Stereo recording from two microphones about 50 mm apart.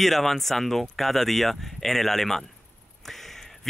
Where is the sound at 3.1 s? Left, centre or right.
Centre.